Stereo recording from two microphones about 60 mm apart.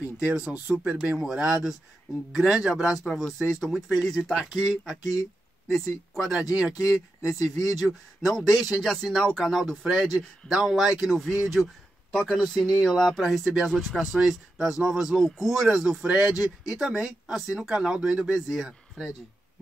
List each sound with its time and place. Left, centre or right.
0.3 s speech: right
2.7 s speech: centre
7.2 s speech: left
7.8 s speech: centre
16.0 s speech: centre
16.3 s speech: centre